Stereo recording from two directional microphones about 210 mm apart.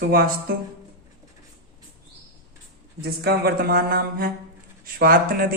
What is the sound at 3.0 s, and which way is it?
Speech, 50° right (ahead or behind).